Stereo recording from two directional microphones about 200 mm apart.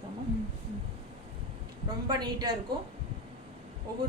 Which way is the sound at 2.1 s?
20° right (ahead or behind).